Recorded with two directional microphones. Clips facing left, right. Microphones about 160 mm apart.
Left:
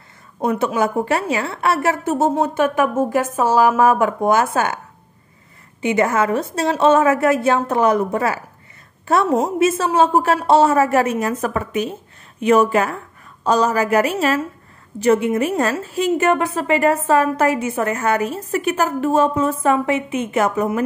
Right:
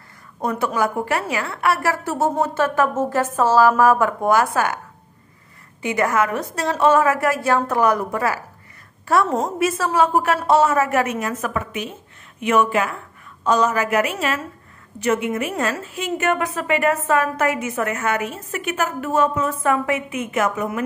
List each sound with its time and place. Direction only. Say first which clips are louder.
0.7 s a woman's voice: left 3 dB; 25° left (ahead or behind)
5.8 s a woman's voice: left 3 dB; 25° left (ahead or behind)